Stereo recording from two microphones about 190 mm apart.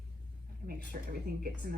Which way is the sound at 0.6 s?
50° right (ahead or behind).